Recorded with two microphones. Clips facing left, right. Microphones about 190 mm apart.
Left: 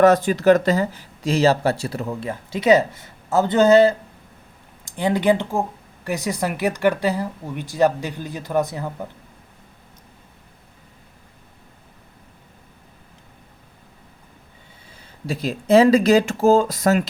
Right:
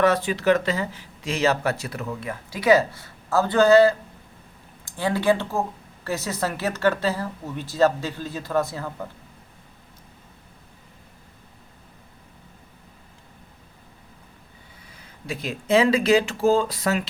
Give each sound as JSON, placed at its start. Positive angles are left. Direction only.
{"t": 0.0, "sound": "speech", "side_deg": 45}
{"t": 4.9, "sound": "a woman's voice", "side_deg": 20}
{"t": 15.3, "sound": "speech", "side_deg": 35}